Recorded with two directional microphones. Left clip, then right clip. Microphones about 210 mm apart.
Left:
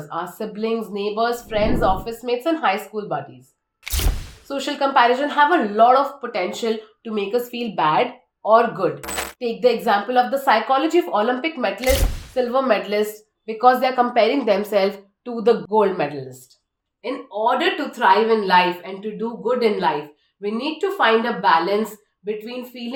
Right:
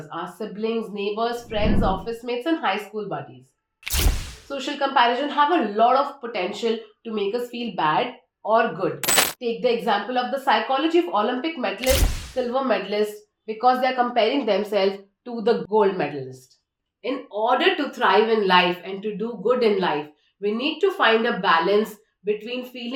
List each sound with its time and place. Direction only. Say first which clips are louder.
0.1 s a woman's voice: left 4 dB; 35° left (ahead or behind)
3.8 s a sound: right 1 dB; centre (ahead or behind)
4.4 s a woman's voice: left 4 dB; 35° left (ahead or behind)
9.0 s coin: right 7 dB; centre (ahead or behind)
9.4 s a woman's voice: left 4 dB; 35° left (ahead or behind)
11.8 s a woman's voice: left 1 dB; centre (ahead or behind)
12.5 s a woman's voice: left 3 dB; 35° left (ahead or behind)
17.0 s a woman's voice: left 3 dB; 5° left (ahead or behind)